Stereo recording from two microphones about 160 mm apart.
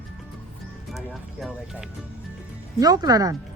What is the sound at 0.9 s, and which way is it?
Speech, centre (ahead or behind).